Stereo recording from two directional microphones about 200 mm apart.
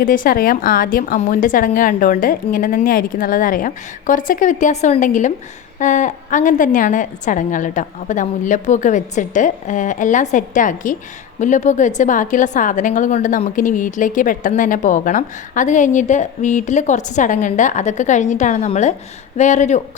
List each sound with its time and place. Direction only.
0.0 s a woman's voice: 45° left (ahead or behind)